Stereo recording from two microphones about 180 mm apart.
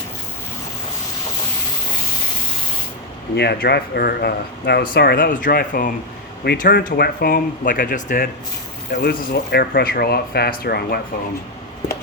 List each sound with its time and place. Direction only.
3.3 s speech: 65° left (ahead or behind); by 8.3 s 50° left (ahead or behind)
8.9 s speech: 70° left (ahead or behind)